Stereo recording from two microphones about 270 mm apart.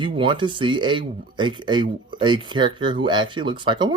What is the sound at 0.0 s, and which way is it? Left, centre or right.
Speech, centre.